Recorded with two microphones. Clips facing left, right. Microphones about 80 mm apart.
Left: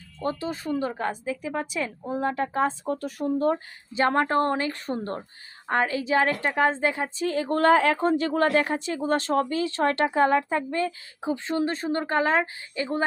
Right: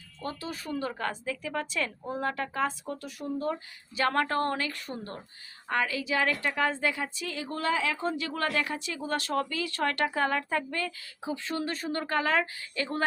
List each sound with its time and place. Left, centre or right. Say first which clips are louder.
0.2 s a woman's voice: left 7 dB; left